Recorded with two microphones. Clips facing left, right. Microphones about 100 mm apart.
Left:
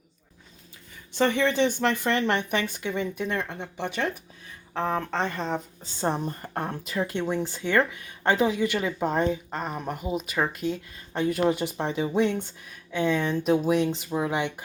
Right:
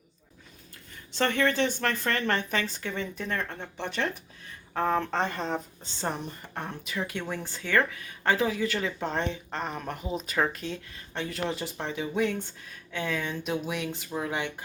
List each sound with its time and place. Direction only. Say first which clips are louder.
1.2 s speech: left 3 dB; 15° left (ahead or behind)
4.7 s speech: right 1 dB; centre (ahead or behind)
6.2 s speech: left 6 dB; 45° left (ahead or behind)
7.2 s speech: left 7 dB; 20° left (ahead or behind)
13.3 s speech: left 9 dB; 40° left (ahead or behind)
13.9 s speech: left 5 dB; 20° left (ahead or behind)